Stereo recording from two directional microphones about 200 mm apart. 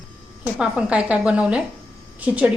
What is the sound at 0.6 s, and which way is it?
A woman's voice, 5° right (ahead or behind).